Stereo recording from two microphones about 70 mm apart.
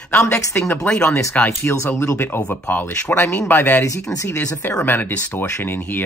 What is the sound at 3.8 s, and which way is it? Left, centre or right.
Speech, left.